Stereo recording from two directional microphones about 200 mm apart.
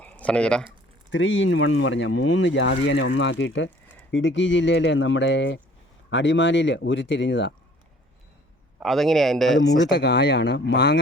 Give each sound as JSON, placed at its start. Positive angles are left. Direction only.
{"t": 0.0, "sound": "speech", "side_deg": 5}
{"t": 1.1, "sound": "speech", "side_deg": 70}
{"t": 8.8, "sound": "speech", "side_deg": 0}
{"t": 9.8, "sound": "speech", "side_deg": 60}